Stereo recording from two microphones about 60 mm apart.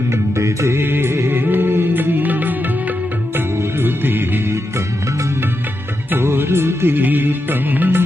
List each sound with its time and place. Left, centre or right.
0.1 s music: right
0.8 s music: right
3.3 s music: right
6.1 s music: right